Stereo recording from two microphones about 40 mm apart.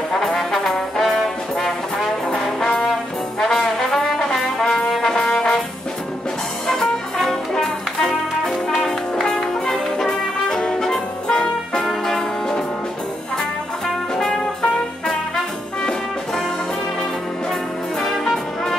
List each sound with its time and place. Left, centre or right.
0.1 s trombone: centre
2.4 s trombone: centre
6.7 s music: centre
10.8 s brass instrument: centre
11.4 s music: centre
14.1 s brass instrument: centre
18.0 s brass instrument: centre